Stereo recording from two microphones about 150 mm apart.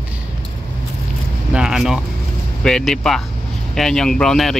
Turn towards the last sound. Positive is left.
turn(degrees=0)  # may be behind; listen again after turning